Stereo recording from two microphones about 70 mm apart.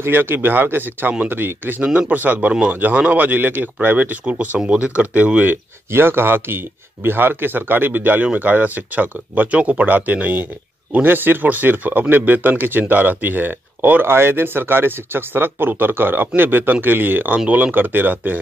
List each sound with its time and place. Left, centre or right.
0.0 s speech: right